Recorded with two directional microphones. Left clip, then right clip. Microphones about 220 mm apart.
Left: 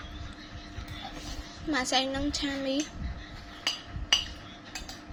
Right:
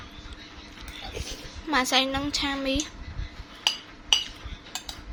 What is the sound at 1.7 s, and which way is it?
A woman's voice, 30° right (ahead or behind).